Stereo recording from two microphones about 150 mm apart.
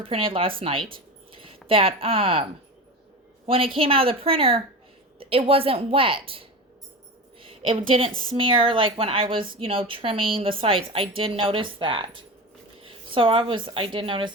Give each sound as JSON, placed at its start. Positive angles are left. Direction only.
{"t": 0.0, "sound": "a woman's voice", "side_deg": -40}
{"t": 0.9, "sound": "a sound", "side_deg": -35}
{"t": 3.4, "sound": "a woman's voice", "side_deg": -40}